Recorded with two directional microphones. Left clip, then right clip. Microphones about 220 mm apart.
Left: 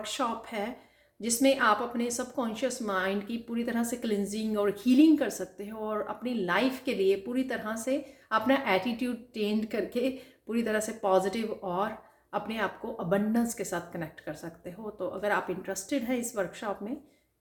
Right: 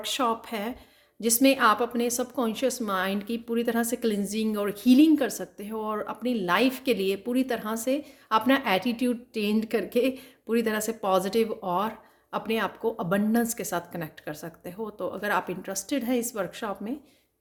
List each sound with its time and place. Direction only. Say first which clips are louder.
0.0 s a woman's voice: right 5 dB; 40° right (ahead or behind)